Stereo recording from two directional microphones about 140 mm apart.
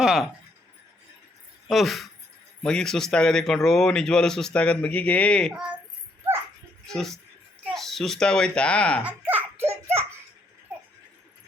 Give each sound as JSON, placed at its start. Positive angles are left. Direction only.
{"t": 0.0, "sound": "speech", "side_deg": -5}
{"t": 1.6, "sound": "speech", "side_deg": 0}
{"t": 6.8, "sound": "speech", "side_deg": 5}
{"t": 9.0, "sound": "belly laugh", "side_deg": -15}